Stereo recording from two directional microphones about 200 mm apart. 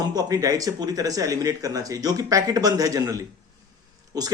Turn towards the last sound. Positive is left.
turn(degrees=-20)  # may be behind; listen again after turning